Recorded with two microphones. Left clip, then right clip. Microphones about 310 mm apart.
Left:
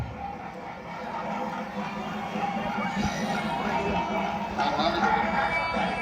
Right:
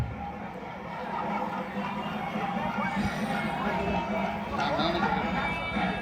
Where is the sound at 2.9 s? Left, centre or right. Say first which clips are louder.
Left 2 dB; centre.